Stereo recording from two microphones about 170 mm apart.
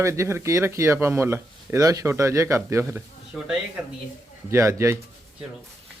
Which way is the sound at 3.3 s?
5° right (ahead or behind).